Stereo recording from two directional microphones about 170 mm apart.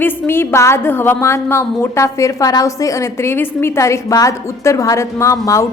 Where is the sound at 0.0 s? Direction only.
15° left (ahead or behind).